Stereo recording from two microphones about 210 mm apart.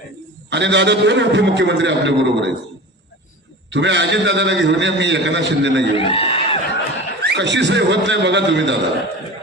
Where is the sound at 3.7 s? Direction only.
55° right (ahead or behind).